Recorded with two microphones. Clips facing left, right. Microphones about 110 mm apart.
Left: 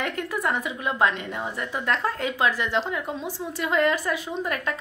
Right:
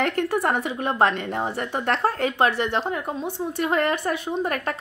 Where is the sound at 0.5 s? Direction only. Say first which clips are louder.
Right 3 dB; 55° right (ahead or behind).